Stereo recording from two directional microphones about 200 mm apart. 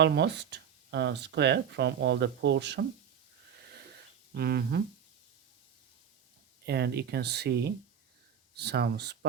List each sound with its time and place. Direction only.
0.0 s speech: 60° right (ahead or behind)
4.4 s speech: 50° right (ahead or behind)
6.7 s speech: 55° right (ahead or behind)